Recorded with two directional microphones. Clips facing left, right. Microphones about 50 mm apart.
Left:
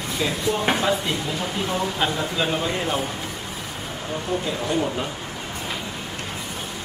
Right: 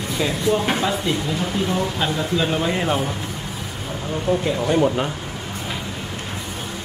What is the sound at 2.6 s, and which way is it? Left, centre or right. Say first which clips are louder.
Speech: right 3 dB; centre.